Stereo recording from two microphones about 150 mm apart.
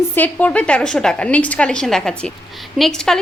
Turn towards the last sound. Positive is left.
turn(degrees=0)  # may be behind; listen again after turning